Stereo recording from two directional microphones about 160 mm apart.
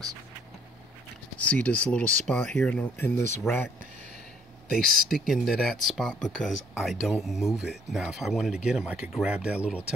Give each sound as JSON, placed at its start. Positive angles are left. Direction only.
{"t": 1.4, "sound": "speech", "side_deg": 10}
{"t": 4.6, "sound": "speech", "side_deg": 70}
{"t": 5.1, "sound": "speech", "side_deg": 0}